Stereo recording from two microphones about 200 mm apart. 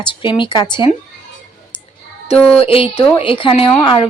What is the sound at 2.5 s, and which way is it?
Speech, 25° left (ahead or behind).